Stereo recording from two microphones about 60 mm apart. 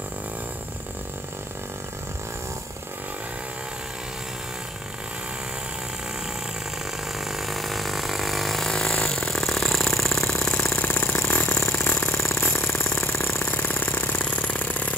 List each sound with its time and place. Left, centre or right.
7.2 s vehicle: centre
10.4 s vehicle: left
12.2 s vehicle: left
13.5 s engine: left